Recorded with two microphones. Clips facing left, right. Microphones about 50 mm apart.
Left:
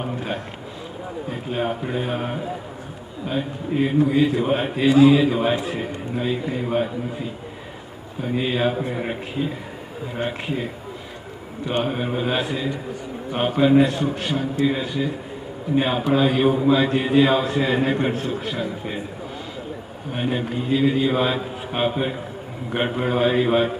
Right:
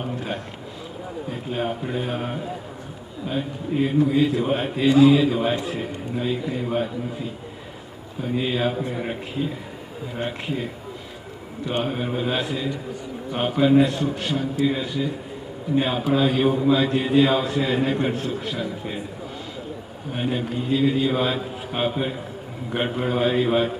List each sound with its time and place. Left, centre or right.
1.3 s a man's voice: centre
8.2 s a man's voice: centre
11.8 s a man's voice: centre
20.1 s a man's voice: centre